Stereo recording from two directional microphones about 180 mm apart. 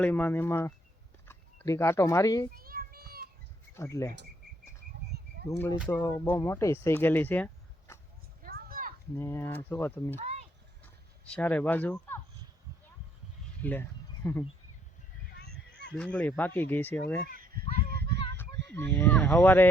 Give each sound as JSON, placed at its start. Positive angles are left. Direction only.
{"t": 0.0, "sound": "speech", "side_deg": 10}
{"t": 2.6, "sound": "a sound", "side_deg": -55}
{"t": 3.8, "sound": "speech", "side_deg": 15}
{"t": 5.5, "sound": "speech", "side_deg": 15}
{"t": 8.4, "sound": "a sound", "side_deg": -55}
{"t": 9.1, "sound": "speech", "side_deg": 15}
{"t": 10.2, "sound": "speech", "side_deg": -40}
{"t": 11.3, "sound": "speech", "side_deg": 10}
{"t": 13.6, "sound": "speech", "side_deg": 10}
{"t": 16.0, "sound": "speech", "side_deg": 5}
{"t": 17.5, "sound": "a sound", "side_deg": -55}
{"t": 18.3, "sound": "speech", "side_deg": 10}